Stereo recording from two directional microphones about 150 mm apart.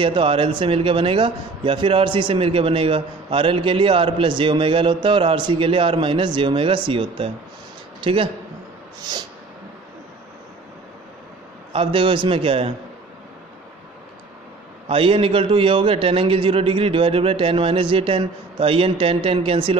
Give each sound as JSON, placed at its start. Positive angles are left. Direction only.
{"t": 0.0, "sound": "a man's voice", "side_deg": -35}
{"t": 9.1, "sound": "a sound", "side_deg": -25}
{"t": 11.7, "sound": "a man's voice", "side_deg": -35}
{"t": 14.9, "sound": "a man's voice", "side_deg": -35}